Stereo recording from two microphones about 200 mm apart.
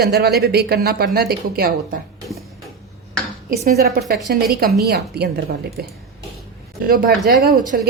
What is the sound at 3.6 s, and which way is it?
A woman's voice, 50° right (ahead or behind).